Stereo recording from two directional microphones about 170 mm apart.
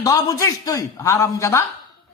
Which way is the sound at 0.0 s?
20° left (ahead or behind).